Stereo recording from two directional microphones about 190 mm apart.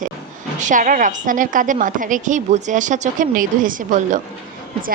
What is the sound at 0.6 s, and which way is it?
A woman's voice, 45° right (ahead or behind).